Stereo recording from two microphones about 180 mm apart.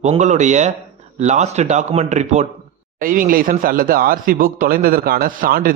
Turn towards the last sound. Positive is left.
turn(degrees=-55)  # may be behind; listen again after turning